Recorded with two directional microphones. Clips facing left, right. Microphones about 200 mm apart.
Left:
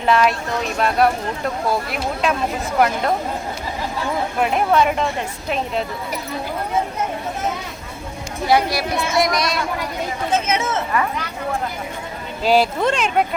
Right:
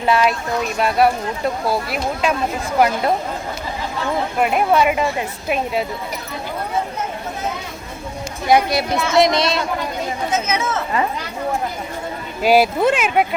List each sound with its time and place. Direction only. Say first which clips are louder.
0.0 s speech: even; 5° right (ahead or behind)
4.4 s speech: right 1 dB; 5° right (ahead or behind)
8.4 s speech: right 2 dB; 20° right (ahead or behind)
10.3 s speech: left 2 dB; 25° left (ahead or behind)
12.4 s speech: right 2 dB; 10° right (ahead or behind)